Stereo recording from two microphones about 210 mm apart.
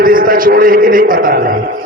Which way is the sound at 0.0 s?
40° right (ahead or behind).